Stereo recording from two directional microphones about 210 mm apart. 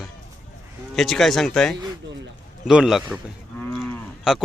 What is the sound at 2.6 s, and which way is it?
Cattle, centre (ahead or behind).